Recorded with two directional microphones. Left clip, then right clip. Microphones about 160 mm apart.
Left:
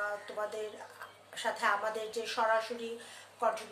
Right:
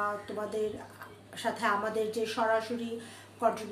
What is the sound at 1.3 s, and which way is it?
A woman's voice, centre (ahead or behind).